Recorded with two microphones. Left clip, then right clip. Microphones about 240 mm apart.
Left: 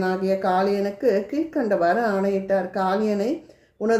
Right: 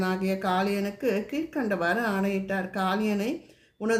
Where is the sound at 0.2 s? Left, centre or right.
Right.